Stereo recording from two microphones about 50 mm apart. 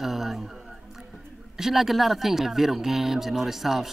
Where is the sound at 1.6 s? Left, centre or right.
Centre.